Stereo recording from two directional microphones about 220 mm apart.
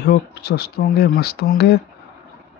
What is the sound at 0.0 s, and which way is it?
Speech, 50° left (ahead or behind).